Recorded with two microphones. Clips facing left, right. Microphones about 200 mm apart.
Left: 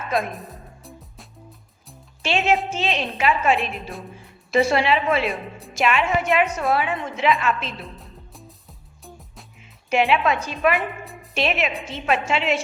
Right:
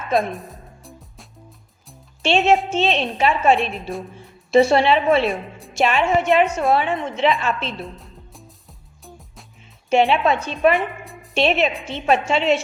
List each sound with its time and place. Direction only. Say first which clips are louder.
0.2 s music: right 4 dB; centre (ahead or behind)
2.2 s a woman's voice: right 4 dB; 25° right (ahead or behind)
5.2 s a woman's voice: right 3 dB; centre (ahead or behind)
5.7 s a woman's voice: right 3 dB; 30° right (ahead or behind)
7.9 s music: right 1 dB; centre (ahead or behind)
9.9 s a woman's voice: right 3 dB; 25° right (ahead or behind)
10.8 s music: right 3 dB; centre (ahead or behind)
11.3 s a woman's voice: right 5 dB; 30° right (ahead or behind)